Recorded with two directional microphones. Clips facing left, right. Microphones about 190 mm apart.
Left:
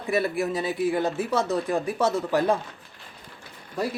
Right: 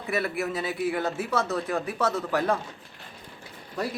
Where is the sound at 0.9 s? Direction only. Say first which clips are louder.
Left 3 dB; 15° left (ahead or behind).